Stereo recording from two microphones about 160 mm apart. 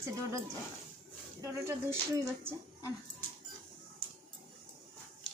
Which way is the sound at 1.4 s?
15° right (ahead or behind).